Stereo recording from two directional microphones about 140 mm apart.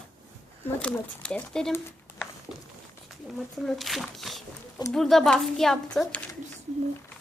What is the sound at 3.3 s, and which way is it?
Speech, centre (ahead or behind).